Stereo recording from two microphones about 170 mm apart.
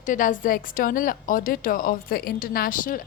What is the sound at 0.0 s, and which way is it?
A woman's voice, 50° left (ahead or behind).